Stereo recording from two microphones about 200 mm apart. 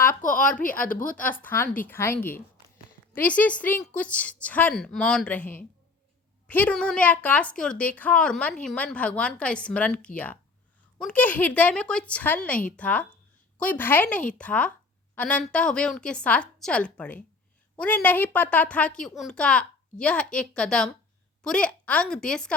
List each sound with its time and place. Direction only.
0.2 s a woman's voice: 40° left (ahead or behind)
1.4 s a woman's voice: 10° left (ahead or behind)